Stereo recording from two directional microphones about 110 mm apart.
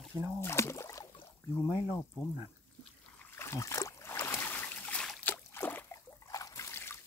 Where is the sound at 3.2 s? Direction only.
20° left (ahead or behind).